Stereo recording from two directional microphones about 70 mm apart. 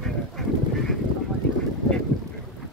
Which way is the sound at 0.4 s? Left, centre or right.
Centre.